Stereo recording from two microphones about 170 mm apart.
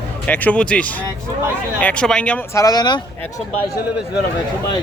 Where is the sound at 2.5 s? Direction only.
20° left (ahead or behind).